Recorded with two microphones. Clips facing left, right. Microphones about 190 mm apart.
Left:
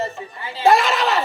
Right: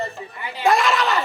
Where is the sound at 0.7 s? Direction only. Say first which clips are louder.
Left 2 dB; centre (ahead or behind).